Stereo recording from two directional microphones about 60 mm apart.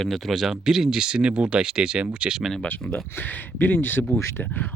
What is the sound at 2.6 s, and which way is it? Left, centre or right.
Speech, left.